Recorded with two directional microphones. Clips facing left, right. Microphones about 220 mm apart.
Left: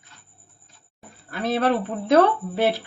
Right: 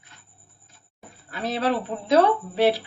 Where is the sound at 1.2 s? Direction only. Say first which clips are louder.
Left 3 dB; 55° left (ahead or behind).